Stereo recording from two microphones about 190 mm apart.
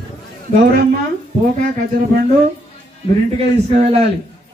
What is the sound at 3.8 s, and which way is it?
Speech, 30° right (ahead or behind).